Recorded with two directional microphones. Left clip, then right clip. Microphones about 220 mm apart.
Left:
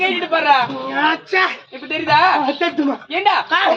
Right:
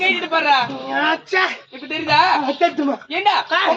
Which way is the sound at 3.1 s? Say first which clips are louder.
Left 2 dB; centre (ahead or behind).